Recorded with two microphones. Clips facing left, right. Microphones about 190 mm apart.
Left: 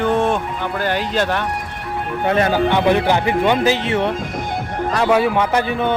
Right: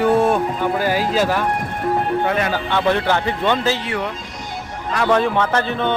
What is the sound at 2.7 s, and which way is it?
Speech, 15° left (ahead or behind).